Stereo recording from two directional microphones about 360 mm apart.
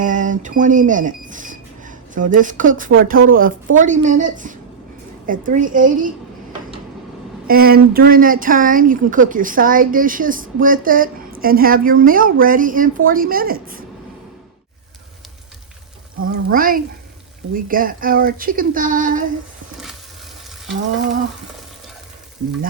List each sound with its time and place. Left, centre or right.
0.0 s speech: right
7.4 s speech: right
16.2 s speech: right